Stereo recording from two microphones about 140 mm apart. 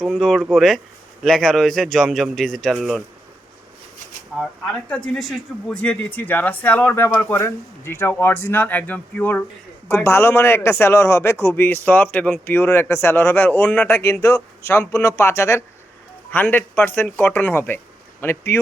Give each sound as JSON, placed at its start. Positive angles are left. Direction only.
{"t": 0.0, "sound": "speech", "side_deg": 0}
{"t": 4.4, "sound": "speech", "side_deg": 5}